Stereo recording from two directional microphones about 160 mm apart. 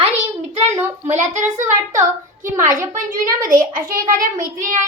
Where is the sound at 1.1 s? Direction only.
50° right (ahead or behind).